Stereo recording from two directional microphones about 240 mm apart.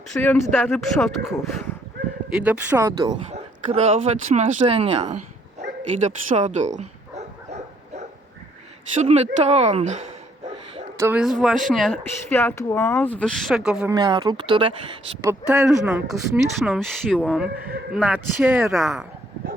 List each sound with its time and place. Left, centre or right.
0.1 s speech: centre
2.3 s speech: centre
3.2 s speech: right
6.0 s bow-wow: right
9.0 s speech: right
10.9 s speech: centre
13.9 s speech: centre